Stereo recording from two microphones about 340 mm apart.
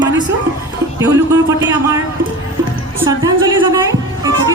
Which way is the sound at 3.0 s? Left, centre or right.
Centre.